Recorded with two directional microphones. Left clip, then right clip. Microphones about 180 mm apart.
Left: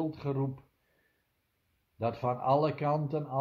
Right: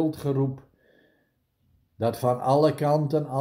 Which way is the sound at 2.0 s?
40° right (ahead or behind).